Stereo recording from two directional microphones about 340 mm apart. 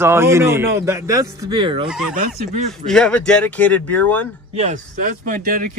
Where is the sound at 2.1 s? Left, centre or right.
Right.